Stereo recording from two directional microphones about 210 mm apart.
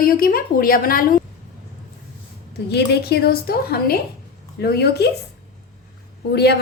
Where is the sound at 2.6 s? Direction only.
50° left (ahead or behind).